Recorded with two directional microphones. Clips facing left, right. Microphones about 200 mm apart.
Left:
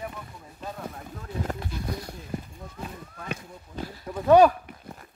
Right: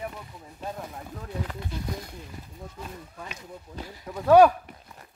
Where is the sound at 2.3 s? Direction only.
50° left (ahead or behind).